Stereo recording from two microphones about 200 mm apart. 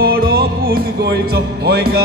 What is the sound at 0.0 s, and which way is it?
Music, 50° right (ahead or behind).